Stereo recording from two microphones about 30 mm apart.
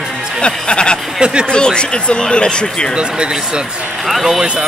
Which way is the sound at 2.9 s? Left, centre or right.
Right.